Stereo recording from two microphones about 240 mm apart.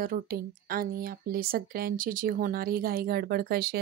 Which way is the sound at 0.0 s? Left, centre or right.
Right.